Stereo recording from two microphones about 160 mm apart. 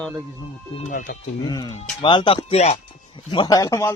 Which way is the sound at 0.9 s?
55° left (ahead or behind).